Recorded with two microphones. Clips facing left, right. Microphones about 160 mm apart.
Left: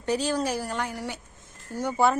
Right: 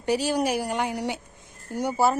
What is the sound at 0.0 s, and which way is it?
A woman's voice, 10° right (ahead or behind).